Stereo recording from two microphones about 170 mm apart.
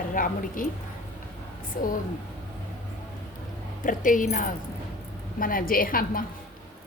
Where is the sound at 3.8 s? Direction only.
50° left (ahead or behind).